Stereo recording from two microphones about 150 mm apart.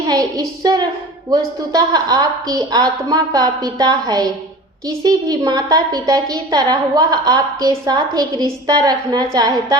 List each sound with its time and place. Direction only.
0.1 s a woman's voice: 25° right (ahead or behind)